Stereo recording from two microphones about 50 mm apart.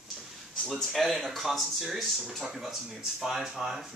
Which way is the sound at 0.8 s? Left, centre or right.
Centre.